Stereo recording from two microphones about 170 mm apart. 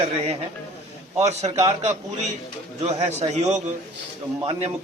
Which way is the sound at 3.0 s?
40° right (ahead or behind).